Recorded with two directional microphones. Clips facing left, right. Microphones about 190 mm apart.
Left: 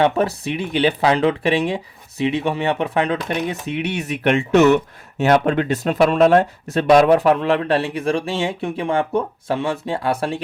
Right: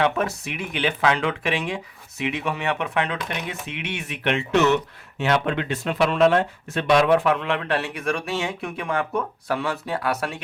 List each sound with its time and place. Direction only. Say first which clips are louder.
0.0 s speech: left 5 dB; 35° left (ahead or behind)